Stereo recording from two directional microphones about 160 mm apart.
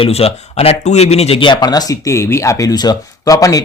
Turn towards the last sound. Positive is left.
turn(degrees=20)  # may be behind; listen again after turning